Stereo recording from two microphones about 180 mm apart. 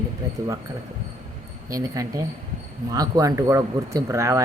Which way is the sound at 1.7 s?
20° right (ahead or behind).